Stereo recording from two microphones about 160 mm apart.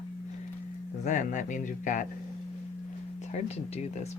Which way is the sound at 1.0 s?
50° left (ahead or behind).